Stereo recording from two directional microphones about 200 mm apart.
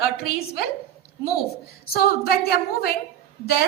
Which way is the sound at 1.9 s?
50° left (ahead or behind).